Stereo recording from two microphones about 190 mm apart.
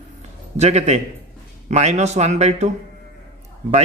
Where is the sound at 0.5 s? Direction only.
35° right (ahead or behind).